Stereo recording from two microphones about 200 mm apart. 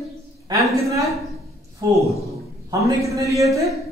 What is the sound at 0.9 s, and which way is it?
Speech, 15° right (ahead or behind).